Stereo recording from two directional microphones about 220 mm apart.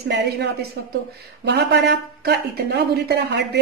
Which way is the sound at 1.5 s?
50° right (ahead or behind).